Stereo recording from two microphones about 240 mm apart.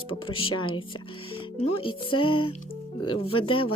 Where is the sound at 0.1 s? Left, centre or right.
Left.